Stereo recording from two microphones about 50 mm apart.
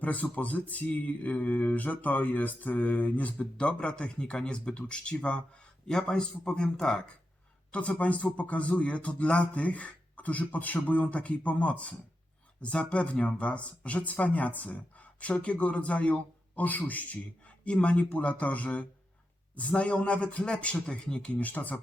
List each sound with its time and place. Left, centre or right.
0.0 s a man's voice: left; by 7.1 s centre
7.7 s speech: left
21.4 s speech: left